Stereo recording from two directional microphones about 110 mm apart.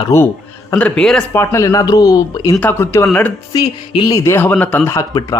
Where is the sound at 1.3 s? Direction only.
25° left (ahead or behind).